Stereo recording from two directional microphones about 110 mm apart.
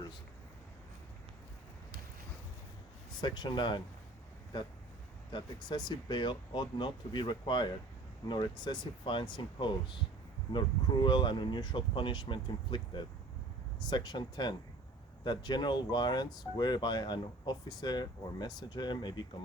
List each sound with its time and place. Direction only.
3.2 s speech: 40° left (ahead or behind)